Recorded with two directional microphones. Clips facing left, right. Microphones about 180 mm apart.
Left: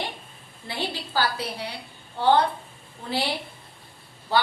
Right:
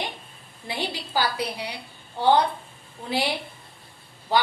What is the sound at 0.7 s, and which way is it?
A woman's voice, 15° right (ahead or behind).